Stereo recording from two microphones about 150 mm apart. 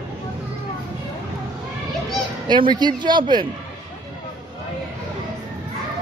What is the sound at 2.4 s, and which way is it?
Speech, 30° right (ahead or behind).